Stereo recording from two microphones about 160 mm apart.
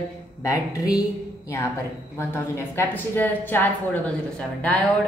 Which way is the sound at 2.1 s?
15° left (ahead or behind).